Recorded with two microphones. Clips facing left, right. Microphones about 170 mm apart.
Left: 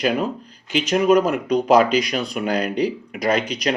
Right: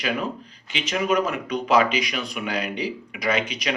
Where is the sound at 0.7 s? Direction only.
45° left (ahead or behind).